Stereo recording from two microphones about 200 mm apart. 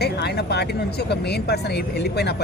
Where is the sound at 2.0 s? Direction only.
55° left (ahead or behind).